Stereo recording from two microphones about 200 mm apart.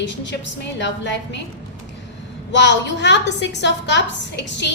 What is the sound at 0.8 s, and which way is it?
Speech, 60° left (ahead or behind).